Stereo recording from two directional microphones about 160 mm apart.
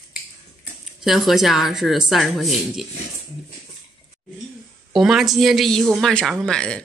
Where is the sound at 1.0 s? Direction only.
Centre (ahead or behind).